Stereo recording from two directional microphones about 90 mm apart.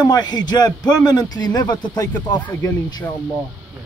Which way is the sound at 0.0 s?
50° left (ahead or behind).